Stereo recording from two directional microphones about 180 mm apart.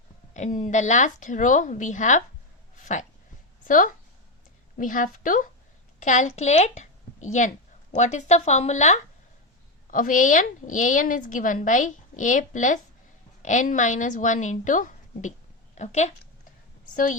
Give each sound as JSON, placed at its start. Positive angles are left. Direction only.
{"t": 0.3, "sound": "a woman's voice", "side_deg": 40}
{"t": 2.7, "sound": "a sound", "side_deg": 45}
{"t": 3.7, "sound": "a woman's voice", "side_deg": 50}